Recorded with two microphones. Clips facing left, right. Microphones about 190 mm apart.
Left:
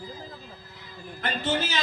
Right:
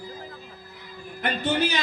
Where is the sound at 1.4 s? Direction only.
15° right (ahead or behind).